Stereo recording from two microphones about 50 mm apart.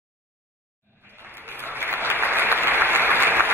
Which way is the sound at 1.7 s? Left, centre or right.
Right.